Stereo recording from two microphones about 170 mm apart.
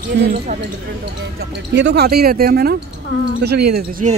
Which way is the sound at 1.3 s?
85° right.